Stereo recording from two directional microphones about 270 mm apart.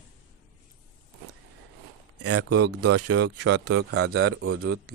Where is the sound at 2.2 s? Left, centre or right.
Right.